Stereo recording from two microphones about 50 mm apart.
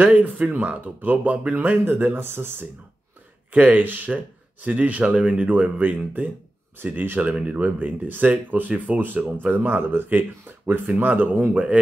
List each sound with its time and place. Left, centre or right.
0.0 s speech: right
3.5 s speech: right
5.0 s speech: centre; by 7.2 s right
7.2 s speech: right